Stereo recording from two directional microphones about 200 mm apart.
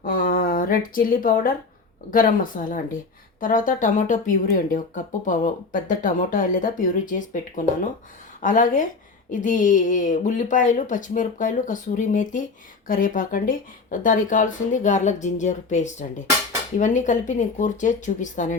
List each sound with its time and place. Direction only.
0.0 s speech: 45° left (ahead or behind)